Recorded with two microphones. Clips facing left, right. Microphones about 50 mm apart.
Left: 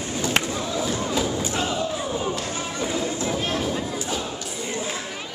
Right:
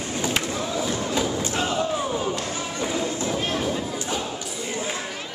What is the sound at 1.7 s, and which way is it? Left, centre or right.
Battle cry, right.